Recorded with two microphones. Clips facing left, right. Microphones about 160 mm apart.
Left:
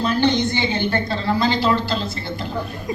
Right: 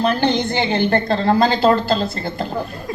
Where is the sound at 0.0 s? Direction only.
50° right (ahead or behind).